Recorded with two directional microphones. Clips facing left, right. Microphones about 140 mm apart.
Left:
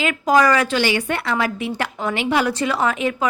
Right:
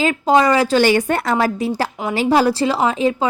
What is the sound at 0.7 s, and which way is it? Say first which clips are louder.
A woman's voice: right 6 dB; 45° right (ahead or behind).